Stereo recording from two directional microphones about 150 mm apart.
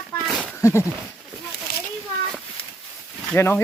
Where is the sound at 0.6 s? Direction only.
15° left (ahead or behind).